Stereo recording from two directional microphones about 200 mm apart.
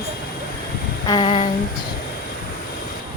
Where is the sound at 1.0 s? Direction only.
20° left (ahead or behind).